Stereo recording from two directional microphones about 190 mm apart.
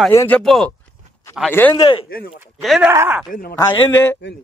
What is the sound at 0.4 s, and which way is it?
A man's voice, centre (ahead or behind).